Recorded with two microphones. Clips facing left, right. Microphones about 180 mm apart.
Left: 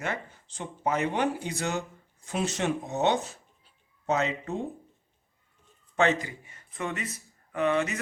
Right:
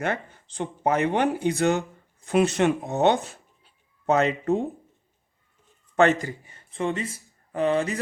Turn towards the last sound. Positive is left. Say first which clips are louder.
# right 3 dB
turn(degrees=-35)  # may be behind; listen again after turning